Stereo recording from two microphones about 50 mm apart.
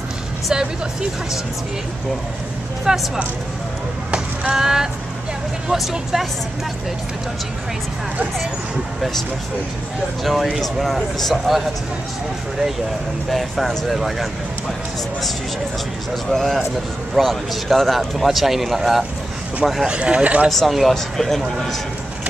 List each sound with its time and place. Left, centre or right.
2.9 s speech: centre
4.1 s a sound: centre
5.7 s a man's voice: centre
10.2 s a man's voice: centre
13.3 s a man's voice: centre
16.3 s a man's voice: centre
19.9 s speech: right
20.4 s a man's voice: centre